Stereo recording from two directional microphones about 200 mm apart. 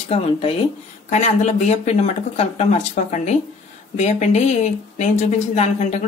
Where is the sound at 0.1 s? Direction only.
30° left (ahead or behind).